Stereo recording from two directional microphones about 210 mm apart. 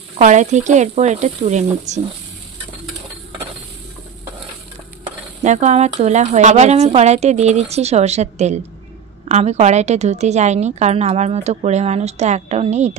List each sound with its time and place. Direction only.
0.2 s a woman's voice: 35° right (ahead or behind)
5.4 s a woman's voice: 35° right (ahead or behind)